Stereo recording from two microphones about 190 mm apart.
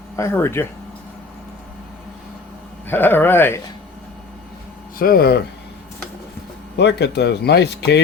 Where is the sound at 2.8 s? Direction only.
10° left (ahead or behind).